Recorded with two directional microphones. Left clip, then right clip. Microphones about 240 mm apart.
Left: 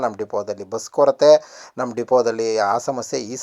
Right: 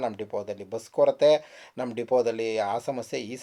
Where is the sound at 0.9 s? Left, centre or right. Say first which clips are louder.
Left 7 dB; centre.